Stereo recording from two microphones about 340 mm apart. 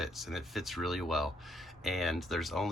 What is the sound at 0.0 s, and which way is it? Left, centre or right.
Speech, centre.